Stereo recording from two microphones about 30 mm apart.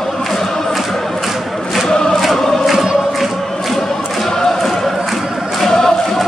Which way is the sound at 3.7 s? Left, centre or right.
Centre.